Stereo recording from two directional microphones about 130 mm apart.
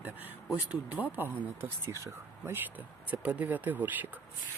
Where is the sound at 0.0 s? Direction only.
15° right (ahead or behind).